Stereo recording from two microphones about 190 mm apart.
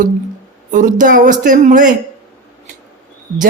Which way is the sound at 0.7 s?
40° right (ahead or behind).